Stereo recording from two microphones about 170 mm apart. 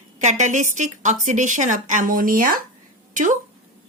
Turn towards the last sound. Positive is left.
turn(degrees=-50)  # may be behind; listen again after turning